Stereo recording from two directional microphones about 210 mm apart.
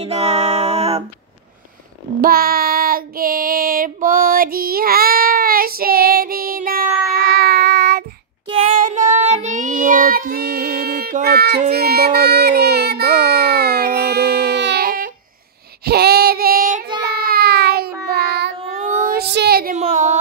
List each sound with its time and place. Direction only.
0.0 s music: 30° right (ahead or behind)
2.2 s child singing: 45° right (ahead or behind)
8.7 s child singing: 35° right (ahead or behind)
18.7 s child singing: 35° right (ahead or behind)
19.7 s a sound: 35° right (ahead or behind)